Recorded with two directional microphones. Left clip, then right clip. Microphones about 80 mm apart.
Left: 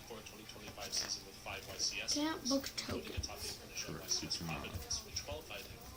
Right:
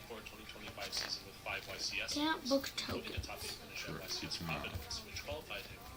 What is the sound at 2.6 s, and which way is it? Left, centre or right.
Speech, left.